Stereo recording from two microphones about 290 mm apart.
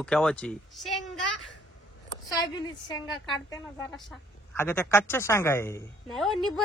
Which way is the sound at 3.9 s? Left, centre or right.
Centre.